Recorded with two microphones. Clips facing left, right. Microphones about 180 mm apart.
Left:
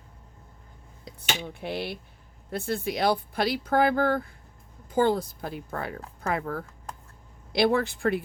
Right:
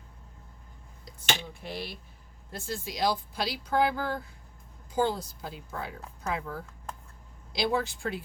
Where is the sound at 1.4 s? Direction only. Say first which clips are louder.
Left 6 dB; 60° left (ahead or behind).